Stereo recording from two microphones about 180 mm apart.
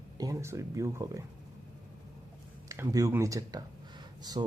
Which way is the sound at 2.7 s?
20° right (ahead or behind).